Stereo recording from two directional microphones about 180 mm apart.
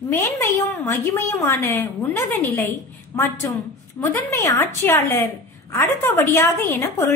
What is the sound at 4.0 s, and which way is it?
A woman's voice, 15° left (ahead or behind).